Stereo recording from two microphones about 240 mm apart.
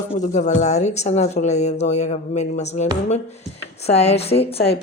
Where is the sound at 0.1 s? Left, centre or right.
Left.